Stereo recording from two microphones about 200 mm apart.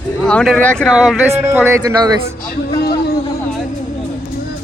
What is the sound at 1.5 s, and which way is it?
Speech, 15° right (ahead or behind).